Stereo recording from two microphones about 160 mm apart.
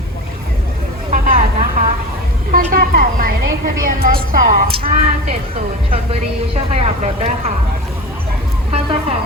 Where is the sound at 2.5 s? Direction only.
65° right (ahead or behind).